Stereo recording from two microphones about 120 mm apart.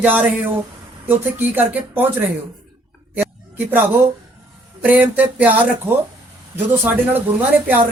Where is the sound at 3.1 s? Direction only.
15° right (ahead or behind).